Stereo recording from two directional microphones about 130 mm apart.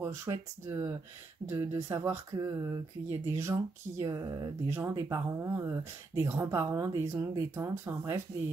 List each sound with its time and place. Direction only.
0.0 s speech: 20° right (ahead or behind)